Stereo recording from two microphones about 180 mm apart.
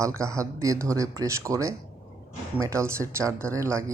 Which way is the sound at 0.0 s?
15° right (ahead or behind).